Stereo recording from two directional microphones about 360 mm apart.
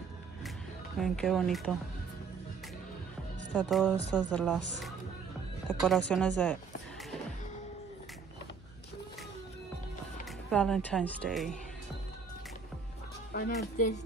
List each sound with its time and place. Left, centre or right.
0.9 s speech: centre
3.5 s speech: centre
10.5 s speech: centre
13.3 s speech: left